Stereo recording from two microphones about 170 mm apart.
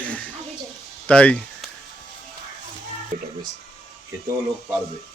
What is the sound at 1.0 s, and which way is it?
Speech, 5° left (ahead or behind).